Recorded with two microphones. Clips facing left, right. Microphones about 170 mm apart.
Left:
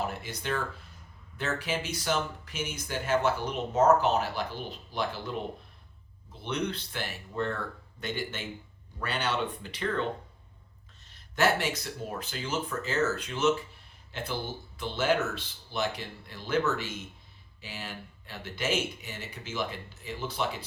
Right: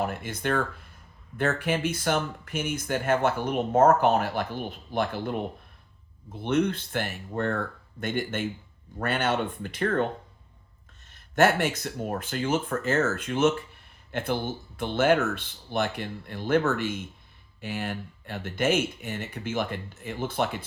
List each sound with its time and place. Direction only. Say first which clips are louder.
0.0 s speech: right 5 dB; 55° right (ahead or behind)
11.1 s speech: right 5 dB; 50° right (ahead or behind)